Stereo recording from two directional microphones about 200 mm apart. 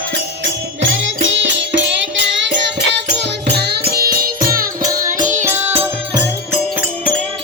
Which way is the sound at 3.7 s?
50° right (ahead or behind).